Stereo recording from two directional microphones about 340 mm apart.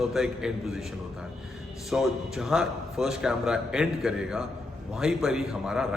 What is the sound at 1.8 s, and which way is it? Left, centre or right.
A man's voice, centre.